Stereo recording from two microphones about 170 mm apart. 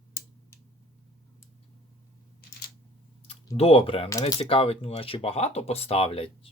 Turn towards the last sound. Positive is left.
turn(degrees=35)  # may be behind; listen again after turning